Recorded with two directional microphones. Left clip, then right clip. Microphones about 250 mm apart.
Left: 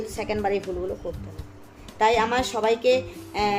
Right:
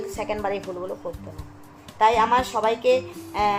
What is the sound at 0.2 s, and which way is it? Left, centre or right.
Speech, centre.